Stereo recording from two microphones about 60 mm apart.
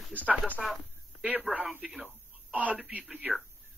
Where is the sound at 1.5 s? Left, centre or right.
Right.